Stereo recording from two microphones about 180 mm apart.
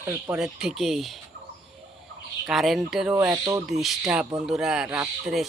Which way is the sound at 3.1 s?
15° right (ahead or behind).